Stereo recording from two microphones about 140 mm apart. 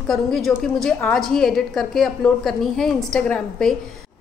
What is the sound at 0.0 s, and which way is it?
A woman's voice, 5° left (ahead or behind).